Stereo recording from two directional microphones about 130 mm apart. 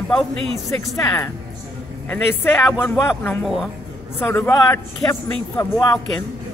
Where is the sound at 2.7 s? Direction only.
20° left (ahead or behind).